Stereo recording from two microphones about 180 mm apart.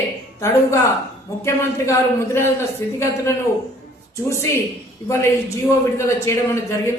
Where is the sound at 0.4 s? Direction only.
15° left (ahead or behind).